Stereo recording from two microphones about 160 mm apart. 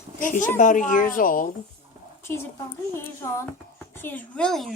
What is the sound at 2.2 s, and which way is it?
Speech, 15° left (ahead or behind).